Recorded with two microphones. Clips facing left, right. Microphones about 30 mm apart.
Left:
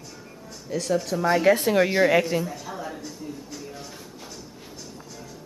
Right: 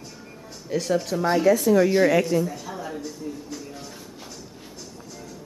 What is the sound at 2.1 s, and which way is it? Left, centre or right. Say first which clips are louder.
Speech: right 1 dB; centre.